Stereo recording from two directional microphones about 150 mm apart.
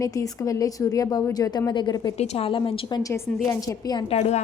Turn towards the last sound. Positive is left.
turn(degrees=50)  # may be behind; listen again after turning